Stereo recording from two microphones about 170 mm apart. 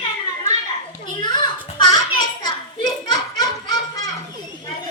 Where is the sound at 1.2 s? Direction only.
25° left (ahead or behind).